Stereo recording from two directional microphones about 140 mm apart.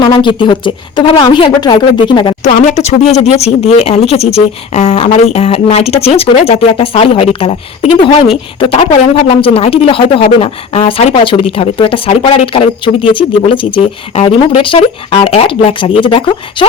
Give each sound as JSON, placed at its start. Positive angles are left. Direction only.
{"t": 0.0, "sound": "speech", "side_deg": 35}
{"t": 2.4, "sound": "speech", "side_deg": 55}